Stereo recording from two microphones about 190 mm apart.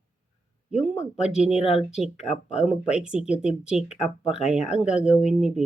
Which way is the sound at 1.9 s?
5° right (ahead or behind).